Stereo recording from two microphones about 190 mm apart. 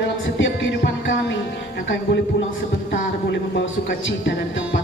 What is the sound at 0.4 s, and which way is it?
Music, 70° left (ahead or behind).